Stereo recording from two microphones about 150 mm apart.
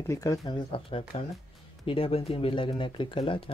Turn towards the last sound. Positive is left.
turn(degrees=35)  # may be behind; listen again after turning